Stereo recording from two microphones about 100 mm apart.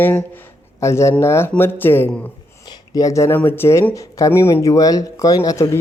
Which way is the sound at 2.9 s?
35° left (ahead or behind).